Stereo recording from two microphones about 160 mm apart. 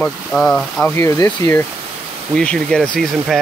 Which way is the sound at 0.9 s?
20° left (ahead or behind).